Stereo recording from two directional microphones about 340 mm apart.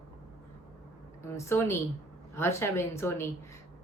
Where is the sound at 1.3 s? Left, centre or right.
Centre.